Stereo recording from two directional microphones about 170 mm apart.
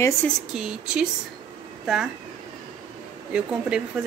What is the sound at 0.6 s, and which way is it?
Speech, 5° right (ahead or behind).